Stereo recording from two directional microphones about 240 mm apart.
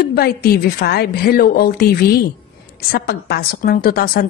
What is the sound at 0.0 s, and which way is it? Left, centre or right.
A woman's voice, left.